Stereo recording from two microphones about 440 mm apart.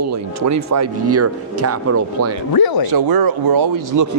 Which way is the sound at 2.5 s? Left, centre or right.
Left.